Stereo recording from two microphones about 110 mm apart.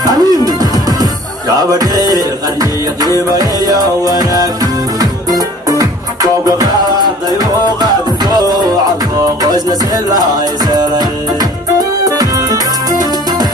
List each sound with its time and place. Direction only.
0.0 s music: 35° right (ahead or behind)
1.6 s music: 35° right (ahead or behind)